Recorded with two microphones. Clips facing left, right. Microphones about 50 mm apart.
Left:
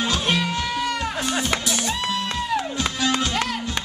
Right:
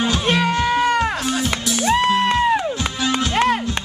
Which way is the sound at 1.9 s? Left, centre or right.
Right.